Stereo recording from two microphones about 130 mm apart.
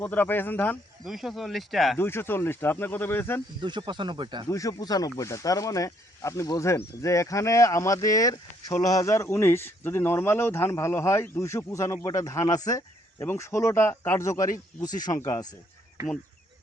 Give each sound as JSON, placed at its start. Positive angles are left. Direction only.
{"t": 0.0, "sound": "speech", "side_deg": 15}
{"t": 1.0, "sound": "speech", "side_deg": 0}
{"t": 2.0, "sound": "speech", "side_deg": 20}
{"t": 3.6, "sound": "speech", "side_deg": -35}
{"t": 4.4, "sound": "speech", "side_deg": 25}